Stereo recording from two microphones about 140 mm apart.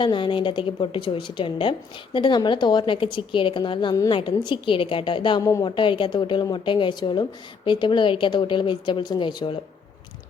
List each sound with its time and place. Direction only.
0.0 s a woman's voice: 35° left (ahead or behind)
5.4 s a woman's voice: 25° left (ahead or behind)
5.6 s a woman's voice: 35° left (ahead or behind)